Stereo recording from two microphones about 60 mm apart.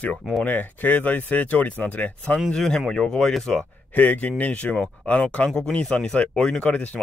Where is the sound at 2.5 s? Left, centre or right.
Centre.